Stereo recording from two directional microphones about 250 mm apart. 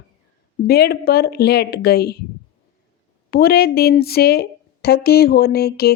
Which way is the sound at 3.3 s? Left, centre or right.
Left.